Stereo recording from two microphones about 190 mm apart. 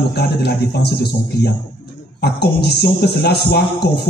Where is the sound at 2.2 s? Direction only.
55° left (ahead or behind).